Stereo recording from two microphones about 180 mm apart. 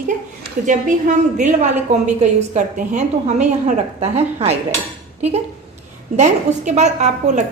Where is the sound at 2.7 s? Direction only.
40° right (ahead or behind).